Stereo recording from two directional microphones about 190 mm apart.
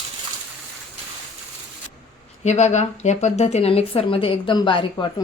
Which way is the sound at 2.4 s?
35° left (ahead or behind).